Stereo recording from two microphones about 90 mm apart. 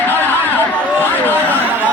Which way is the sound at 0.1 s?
20° left (ahead or behind).